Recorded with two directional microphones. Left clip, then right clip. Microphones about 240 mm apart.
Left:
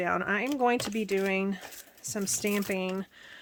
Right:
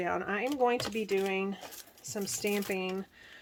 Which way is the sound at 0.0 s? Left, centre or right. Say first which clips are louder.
Left 4 dB; left.